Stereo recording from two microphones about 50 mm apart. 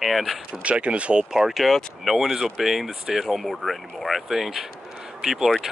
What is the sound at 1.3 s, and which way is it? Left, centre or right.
Speech, centre.